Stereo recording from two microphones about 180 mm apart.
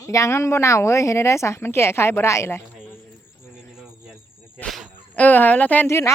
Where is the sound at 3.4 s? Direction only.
10° left (ahead or behind).